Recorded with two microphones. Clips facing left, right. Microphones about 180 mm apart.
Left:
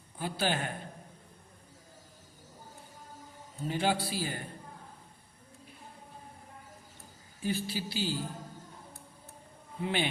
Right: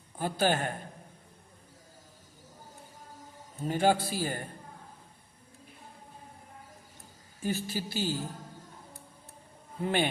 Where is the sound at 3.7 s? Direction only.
45° right (ahead or behind).